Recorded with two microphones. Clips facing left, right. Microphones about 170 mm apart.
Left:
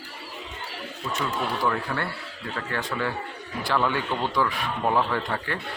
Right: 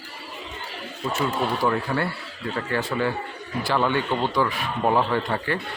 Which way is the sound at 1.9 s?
25° right (ahead or behind).